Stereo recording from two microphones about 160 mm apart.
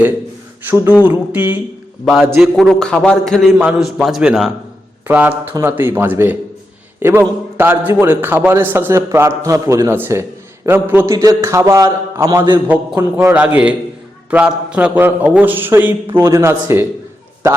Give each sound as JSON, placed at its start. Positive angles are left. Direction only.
{"t": 0.6, "sound": "a sound", "side_deg": -10}
{"t": 1.0, "sound": "a man's voice", "side_deg": -10}
{"t": 2.4, "sound": "a man's voice", "side_deg": 0}